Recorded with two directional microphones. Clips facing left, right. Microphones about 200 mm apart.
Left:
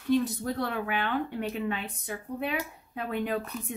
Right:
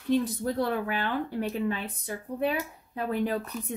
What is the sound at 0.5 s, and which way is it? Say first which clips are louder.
Speech: right 2 dB; 35° right (ahead or behind).